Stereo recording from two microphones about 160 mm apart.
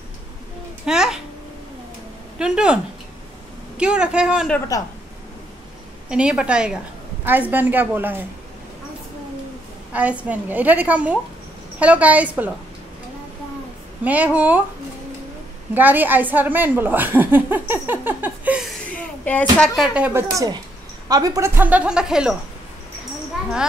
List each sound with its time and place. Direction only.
0.8 s a sound: 5° right (ahead or behind)
2.3 s speech: 5° right (ahead or behind)
4.7 s a woman's voice: 20° left (ahead or behind)
6.0 s a woman's voice: 5° right (ahead or behind)
9.9 s a woman's voice: 10° right (ahead or behind)
14.0 s a woman's voice: 10° right (ahead or behind)
15.7 s a woman's voice: 10° right (ahead or behind)
18.9 s a sound: 10° left (ahead or behind)
19.6 s speech: centre (ahead or behind)
20.3 s speech: 25° right (ahead or behind)
21.5 s speech: 10° right (ahead or behind)